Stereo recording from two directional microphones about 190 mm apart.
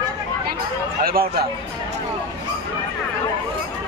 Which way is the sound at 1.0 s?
50° right (ahead or behind).